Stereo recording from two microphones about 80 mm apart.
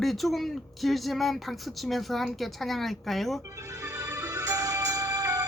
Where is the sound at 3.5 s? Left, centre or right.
Right.